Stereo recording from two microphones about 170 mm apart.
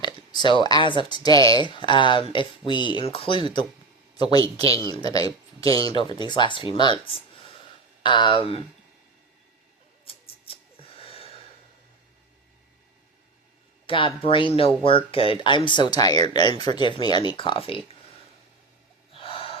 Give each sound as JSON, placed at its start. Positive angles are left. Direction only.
{"t": 0.0, "sound": "speech", "side_deg": 25}
{"t": 10.1, "sound": "a sound", "side_deg": 35}
{"t": 13.8, "sound": "speech", "side_deg": 30}
{"t": 19.1, "sound": "gasp", "side_deg": 35}